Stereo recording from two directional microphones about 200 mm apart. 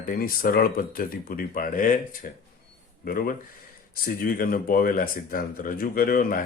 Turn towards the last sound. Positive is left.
turn(degrees=45)  # may be behind; listen again after turning